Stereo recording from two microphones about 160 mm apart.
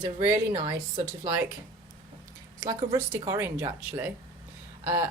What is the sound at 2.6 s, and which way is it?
Speech, 20° right (ahead or behind).